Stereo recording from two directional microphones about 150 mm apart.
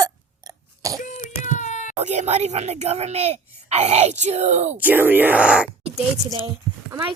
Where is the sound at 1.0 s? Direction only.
60° left (ahead or behind).